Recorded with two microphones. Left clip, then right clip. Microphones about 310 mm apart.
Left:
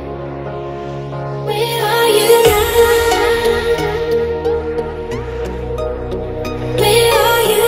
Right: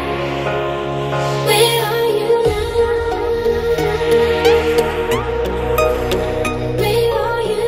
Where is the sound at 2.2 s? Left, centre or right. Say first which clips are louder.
Left 5 dB; left.